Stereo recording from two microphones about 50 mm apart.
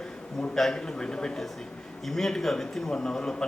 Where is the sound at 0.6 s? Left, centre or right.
Centre.